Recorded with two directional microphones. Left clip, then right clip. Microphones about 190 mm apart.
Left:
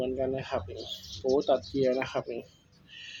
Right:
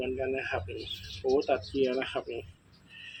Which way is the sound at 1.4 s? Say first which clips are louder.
Left 2 dB; 30° left (ahead or behind).